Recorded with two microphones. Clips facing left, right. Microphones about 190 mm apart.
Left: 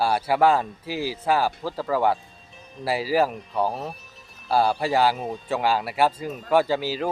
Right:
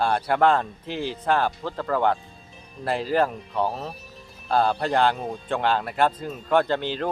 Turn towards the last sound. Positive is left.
turn(degrees=5)  # may be behind; listen again after turning